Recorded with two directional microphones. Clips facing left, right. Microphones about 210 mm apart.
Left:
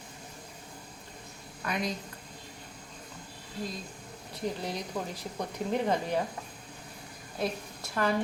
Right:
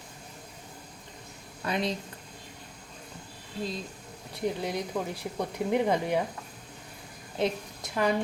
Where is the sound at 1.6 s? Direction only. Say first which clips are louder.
Right 3 dB; 30° right (ahead or behind).